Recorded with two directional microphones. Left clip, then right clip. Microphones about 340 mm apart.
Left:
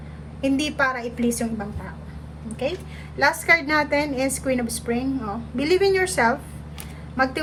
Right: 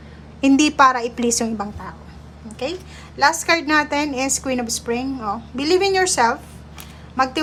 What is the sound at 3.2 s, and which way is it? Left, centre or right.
A woman's voice, centre.